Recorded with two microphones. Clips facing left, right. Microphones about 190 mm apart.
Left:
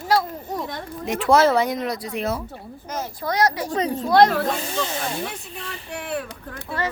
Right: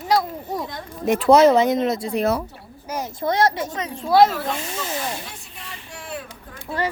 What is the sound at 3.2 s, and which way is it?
Speech, 25° right (ahead or behind).